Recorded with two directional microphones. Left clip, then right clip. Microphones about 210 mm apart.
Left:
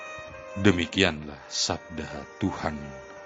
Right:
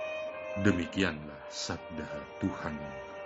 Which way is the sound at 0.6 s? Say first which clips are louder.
Left 8 dB; 45° left (ahead or behind).